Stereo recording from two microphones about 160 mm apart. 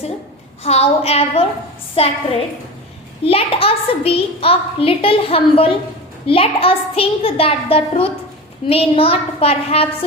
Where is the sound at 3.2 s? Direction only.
35° left (ahead or behind).